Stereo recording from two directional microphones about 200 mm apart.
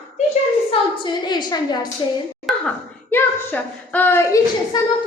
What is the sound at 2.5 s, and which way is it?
A child's voice, 10° left (ahead or behind).